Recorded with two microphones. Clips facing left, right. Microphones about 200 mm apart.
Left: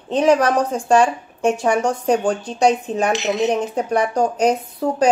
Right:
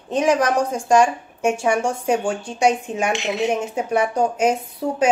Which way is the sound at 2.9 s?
35° left (ahead or behind).